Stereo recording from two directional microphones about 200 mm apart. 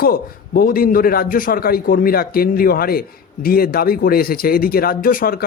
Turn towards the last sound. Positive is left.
turn(degrees=45)  # may be behind; listen again after turning